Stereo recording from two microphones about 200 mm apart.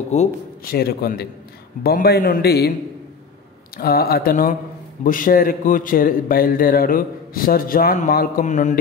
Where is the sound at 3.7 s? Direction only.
50° left (ahead or behind).